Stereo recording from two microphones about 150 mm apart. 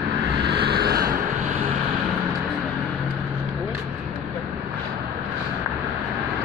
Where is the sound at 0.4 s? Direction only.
90° right.